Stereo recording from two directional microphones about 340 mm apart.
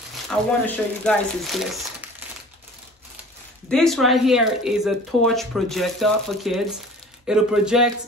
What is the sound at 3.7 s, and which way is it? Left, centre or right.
Speech, centre.